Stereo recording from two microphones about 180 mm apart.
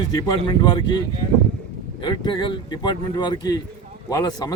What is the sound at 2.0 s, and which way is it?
A man's voice, 25° left (ahead or behind).